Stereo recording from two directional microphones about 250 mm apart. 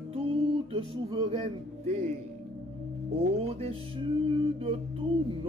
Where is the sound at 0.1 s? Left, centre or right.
Right.